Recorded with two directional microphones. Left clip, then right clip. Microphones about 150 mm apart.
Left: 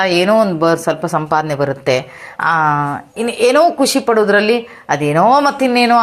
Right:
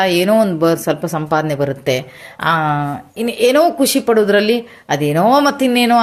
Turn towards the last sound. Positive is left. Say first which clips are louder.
# left 2 dB
turn(degrees=-25)  # may be behind; listen again after turning